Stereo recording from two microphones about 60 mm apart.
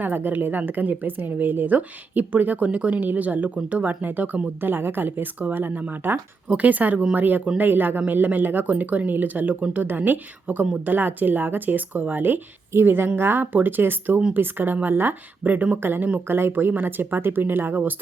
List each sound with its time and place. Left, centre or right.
0.0 s speech: right